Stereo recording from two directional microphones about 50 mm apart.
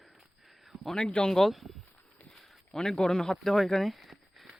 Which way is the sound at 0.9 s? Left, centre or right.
Centre.